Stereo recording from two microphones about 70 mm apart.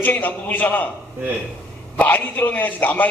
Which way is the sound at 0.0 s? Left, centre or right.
Left.